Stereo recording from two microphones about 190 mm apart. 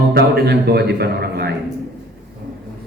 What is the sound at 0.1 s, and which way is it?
A man's voice, 55° right (ahead or behind).